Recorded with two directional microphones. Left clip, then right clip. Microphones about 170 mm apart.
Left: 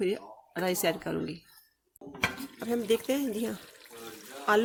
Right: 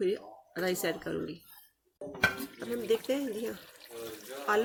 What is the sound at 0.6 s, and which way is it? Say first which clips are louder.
Speech: left 3 dB; 35° left (ahead or behind).